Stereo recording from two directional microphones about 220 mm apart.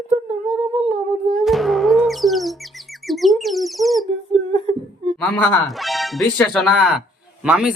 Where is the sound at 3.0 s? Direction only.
Centre (ahead or behind).